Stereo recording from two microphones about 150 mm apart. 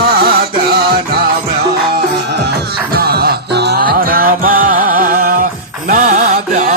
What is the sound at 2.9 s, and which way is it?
Music, 90° right.